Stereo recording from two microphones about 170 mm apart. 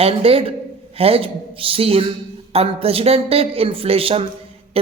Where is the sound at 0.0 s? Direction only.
35° right (ahead or behind).